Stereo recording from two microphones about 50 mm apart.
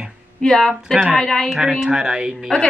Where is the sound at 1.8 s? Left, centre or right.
Centre.